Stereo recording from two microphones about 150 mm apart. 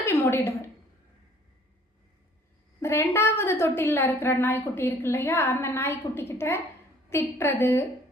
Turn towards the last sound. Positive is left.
turn(degrees=15)  # may be behind; listen again after turning